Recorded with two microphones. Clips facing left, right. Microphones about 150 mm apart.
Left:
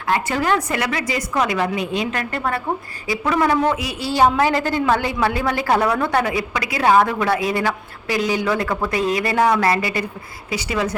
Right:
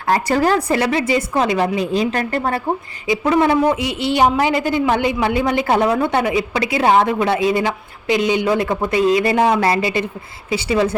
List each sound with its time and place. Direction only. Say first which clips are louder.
0.1 s a woman's voice: right 4 dB; 35° right (ahead or behind)
3.1 s a woman's voice: right 4 dB; 25° right (ahead or behind)